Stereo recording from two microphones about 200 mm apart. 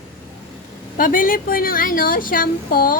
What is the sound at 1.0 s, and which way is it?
A woman's voice, 45° left (ahead or behind).